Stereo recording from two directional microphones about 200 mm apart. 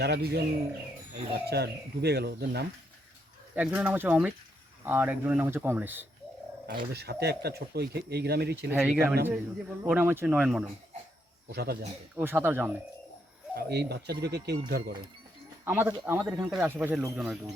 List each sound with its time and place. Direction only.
0.0 s speech: 55° right (ahead or behind)
1.5 s speech: 55° right (ahead or behind)
3.5 s speech: 10° right (ahead or behind)
6.7 s speech: 50° right (ahead or behind)
8.7 s speech: 10° right (ahead or behind)
11.4 s speech: 55° right (ahead or behind)
12.1 s speech: 10° right (ahead or behind)
13.6 s speech: 55° right (ahead or behind)
15.6 s speech: 10° right (ahead or behind)